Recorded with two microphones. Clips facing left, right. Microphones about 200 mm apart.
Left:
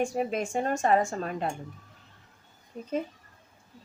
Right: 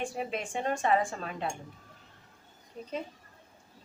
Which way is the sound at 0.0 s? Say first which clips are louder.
Left 6 dB; 45° left (ahead or behind).